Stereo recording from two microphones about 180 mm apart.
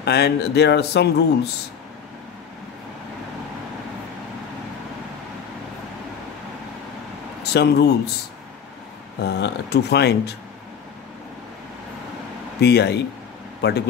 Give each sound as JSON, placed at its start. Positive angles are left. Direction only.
{"t": 0.0, "sound": "speech", "side_deg": 65}
{"t": 7.4, "sound": "speech", "side_deg": 65}
{"t": 9.2, "sound": "speech", "side_deg": 65}
{"t": 12.5, "sound": "speech", "side_deg": 65}